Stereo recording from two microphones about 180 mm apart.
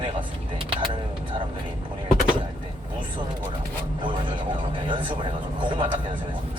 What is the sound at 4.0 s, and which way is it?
A man's voice, 25° right (ahead or behind).